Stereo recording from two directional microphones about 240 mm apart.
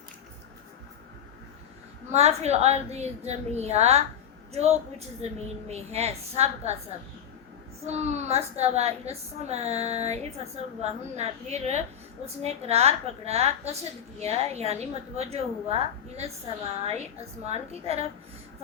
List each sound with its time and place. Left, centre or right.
2.1 s a woman's voice: right
7.9 s a woman's voice: right
17.4 s a woman's voice: right